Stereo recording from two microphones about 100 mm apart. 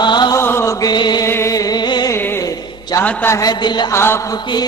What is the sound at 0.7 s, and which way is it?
Chant, 45° left (ahead or behind).